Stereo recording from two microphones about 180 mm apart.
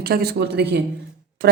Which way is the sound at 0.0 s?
60° right (ahead or behind).